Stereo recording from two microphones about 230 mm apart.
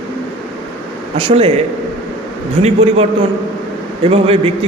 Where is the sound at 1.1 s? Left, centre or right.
Right.